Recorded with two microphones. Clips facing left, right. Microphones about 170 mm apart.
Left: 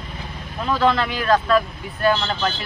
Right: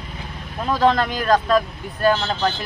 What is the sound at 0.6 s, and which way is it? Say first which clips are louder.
Speech: right 1 dB; 40° right (ahead or behind).